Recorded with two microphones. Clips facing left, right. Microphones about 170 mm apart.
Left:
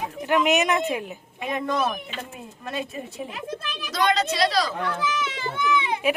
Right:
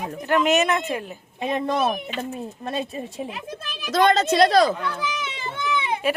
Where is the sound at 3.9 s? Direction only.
50° right (ahead or behind).